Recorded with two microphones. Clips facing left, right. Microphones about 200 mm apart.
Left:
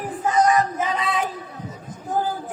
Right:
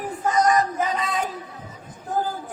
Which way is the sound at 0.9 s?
45° right (ahead or behind).